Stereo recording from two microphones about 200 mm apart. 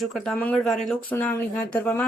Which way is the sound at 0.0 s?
Centre (ahead or behind).